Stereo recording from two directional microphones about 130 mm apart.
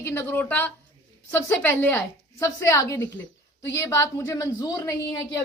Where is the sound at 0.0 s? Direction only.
15° left (ahead or behind).